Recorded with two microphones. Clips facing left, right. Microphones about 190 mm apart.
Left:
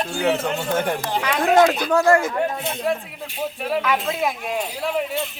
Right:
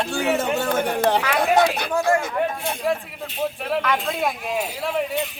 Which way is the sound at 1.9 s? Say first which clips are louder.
Left 4 dB; 70° left (ahead or behind).